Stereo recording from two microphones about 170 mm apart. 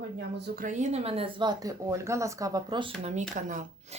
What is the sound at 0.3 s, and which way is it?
Speech, 80° right.